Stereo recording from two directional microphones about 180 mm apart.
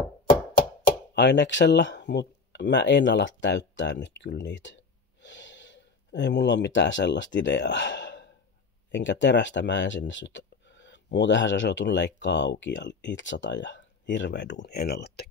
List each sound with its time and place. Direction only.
1.1 s speech: 75° left (ahead or behind)
5.2 s gasp: 90° left
8.9 s speech: 85° left; by 15.2 s 60° left (ahead or behind)